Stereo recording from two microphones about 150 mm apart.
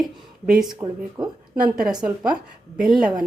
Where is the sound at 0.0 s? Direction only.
5° right (ahead or behind).